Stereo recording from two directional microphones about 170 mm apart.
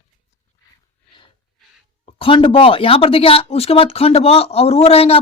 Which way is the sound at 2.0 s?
30° left (ahead or behind).